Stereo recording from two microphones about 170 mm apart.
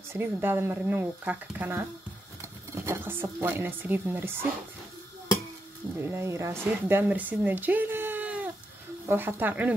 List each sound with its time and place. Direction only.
0.1 s a woman's voice: 15° right (ahead or behind)
5.9 s a woman's voice: 15° right (ahead or behind)